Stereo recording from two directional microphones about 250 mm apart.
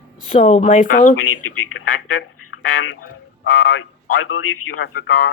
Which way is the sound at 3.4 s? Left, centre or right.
Left.